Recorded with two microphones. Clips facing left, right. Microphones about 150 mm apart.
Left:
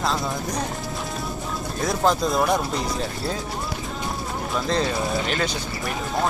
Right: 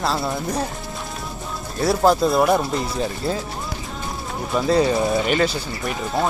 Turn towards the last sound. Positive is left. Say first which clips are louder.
# right 2 dB
turn(degrees=-5)  # may be behind; listen again after turning